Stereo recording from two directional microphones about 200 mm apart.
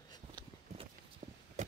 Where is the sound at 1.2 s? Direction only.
35° right (ahead or behind).